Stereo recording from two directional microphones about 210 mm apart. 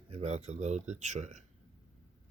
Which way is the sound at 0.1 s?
30° right (ahead or behind).